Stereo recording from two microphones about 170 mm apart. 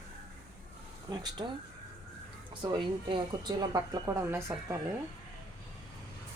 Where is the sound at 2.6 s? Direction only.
25° right (ahead or behind).